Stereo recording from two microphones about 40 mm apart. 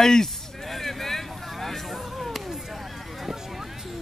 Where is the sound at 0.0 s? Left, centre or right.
Centre.